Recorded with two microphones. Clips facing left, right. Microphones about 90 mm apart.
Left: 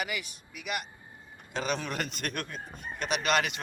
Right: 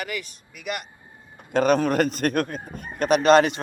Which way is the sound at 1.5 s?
50° right (ahead or behind).